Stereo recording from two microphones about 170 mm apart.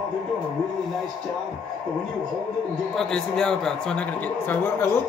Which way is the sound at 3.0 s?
5° left (ahead or behind).